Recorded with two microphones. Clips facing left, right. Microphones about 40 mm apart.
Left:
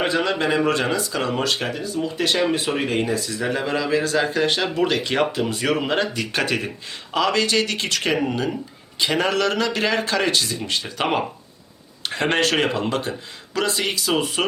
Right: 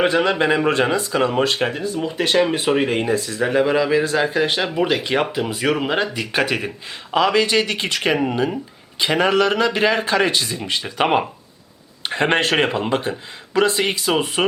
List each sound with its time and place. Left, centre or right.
0.0 s speech: right
3.1 s speech: right
3.6 s speech: centre